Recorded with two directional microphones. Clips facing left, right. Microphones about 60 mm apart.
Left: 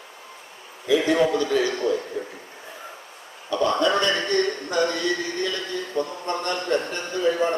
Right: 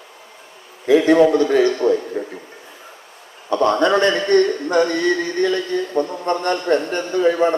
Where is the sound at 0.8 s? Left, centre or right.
Right.